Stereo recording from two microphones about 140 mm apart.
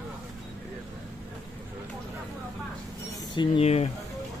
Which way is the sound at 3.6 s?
50° left (ahead or behind).